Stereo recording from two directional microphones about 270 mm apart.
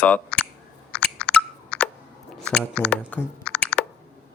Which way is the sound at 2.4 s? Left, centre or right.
Centre.